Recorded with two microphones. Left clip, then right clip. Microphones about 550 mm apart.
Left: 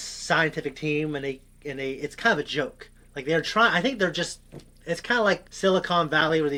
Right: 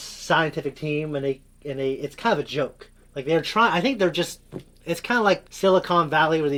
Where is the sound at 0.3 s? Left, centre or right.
Right.